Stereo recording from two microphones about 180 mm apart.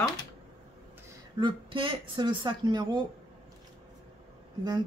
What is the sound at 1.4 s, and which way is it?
Speech, 30° right (ahead or behind).